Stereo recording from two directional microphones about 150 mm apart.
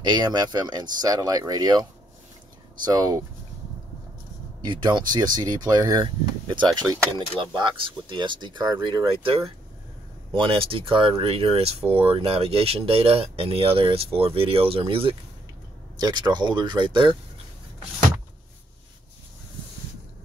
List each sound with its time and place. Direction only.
0.0 s speech: 30° right (ahead or behind)
4.6 s speech: 30° right (ahead or behind)